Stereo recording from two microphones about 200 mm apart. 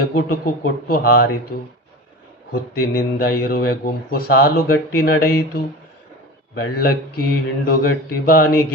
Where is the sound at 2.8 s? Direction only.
50° left (ahead or behind).